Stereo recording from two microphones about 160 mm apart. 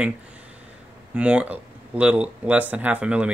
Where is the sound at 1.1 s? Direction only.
10° right (ahead or behind).